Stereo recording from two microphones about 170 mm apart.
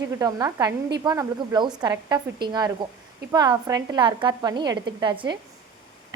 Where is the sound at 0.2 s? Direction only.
20° right (ahead or behind).